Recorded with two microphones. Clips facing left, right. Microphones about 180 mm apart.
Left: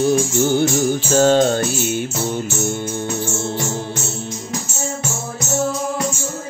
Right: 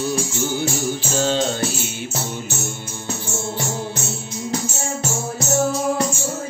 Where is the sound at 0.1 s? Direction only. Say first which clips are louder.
Left 7 dB; 55° left (ahead or behind).